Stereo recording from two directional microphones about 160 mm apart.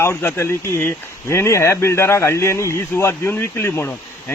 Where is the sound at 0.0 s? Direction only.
15° left (ahead or behind).